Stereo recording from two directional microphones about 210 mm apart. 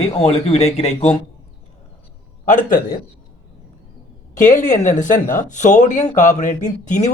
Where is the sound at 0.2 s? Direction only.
30° left (ahead or behind).